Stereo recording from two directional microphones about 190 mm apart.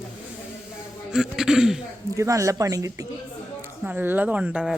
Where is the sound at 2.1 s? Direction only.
15° right (ahead or behind).